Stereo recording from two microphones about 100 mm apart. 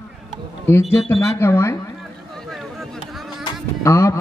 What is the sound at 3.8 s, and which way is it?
Speech, 30° left (ahead or behind).